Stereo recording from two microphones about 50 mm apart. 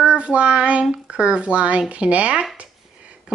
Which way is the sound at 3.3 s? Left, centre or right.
Right.